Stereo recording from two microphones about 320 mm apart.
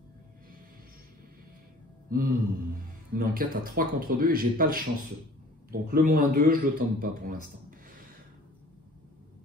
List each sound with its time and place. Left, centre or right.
2.0 s speech: right